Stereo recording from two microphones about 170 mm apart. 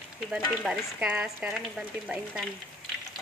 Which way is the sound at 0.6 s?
5° right (ahead or behind).